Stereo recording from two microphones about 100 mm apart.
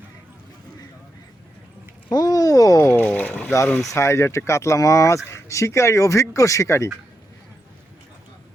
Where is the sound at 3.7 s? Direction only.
25° left (ahead or behind).